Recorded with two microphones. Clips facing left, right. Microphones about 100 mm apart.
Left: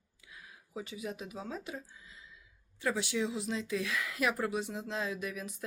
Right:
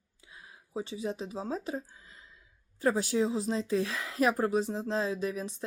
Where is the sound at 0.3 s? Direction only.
30° right (ahead or behind).